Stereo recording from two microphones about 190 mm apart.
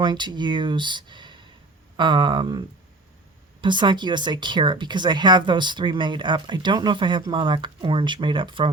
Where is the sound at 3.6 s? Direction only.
25° right (ahead or behind).